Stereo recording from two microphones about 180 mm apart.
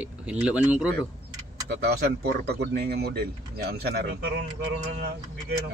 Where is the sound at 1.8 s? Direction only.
60° right (ahead or behind).